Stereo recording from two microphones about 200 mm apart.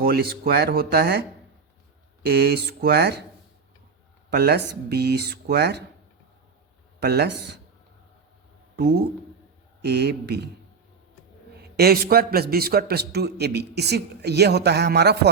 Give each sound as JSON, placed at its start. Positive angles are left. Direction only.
{"t": 0.0, "sound": "speech", "side_deg": -50}
{"t": 2.2, "sound": "a man's voice", "side_deg": -55}
{"t": 4.3, "sound": "speech", "side_deg": -55}
{"t": 7.0, "sound": "speech", "side_deg": -55}
{"t": 9.8, "sound": "a man's voice", "side_deg": -55}
{"t": 11.8, "sound": "a man's voice", "side_deg": -50}